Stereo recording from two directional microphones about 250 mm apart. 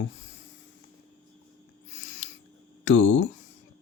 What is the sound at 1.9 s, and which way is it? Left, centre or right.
Owl, left.